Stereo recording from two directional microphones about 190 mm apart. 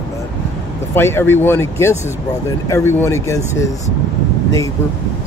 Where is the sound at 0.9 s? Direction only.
10° left (ahead or behind).